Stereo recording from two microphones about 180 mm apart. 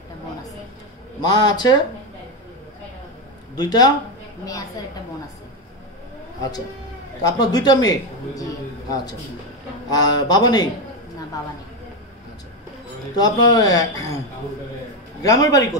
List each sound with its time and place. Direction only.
1.2 s a man's voice: 25° left (ahead or behind)
3.5 s a man's voice: 20° left (ahead or behind)
7.2 s a man's voice: 20° left (ahead or behind)
9.8 s a man's voice: 20° left (ahead or behind)
13.1 s a man's voice: 20° left (ahead or behind)
15.2 s a man's voice: 20° left (ahead or behind)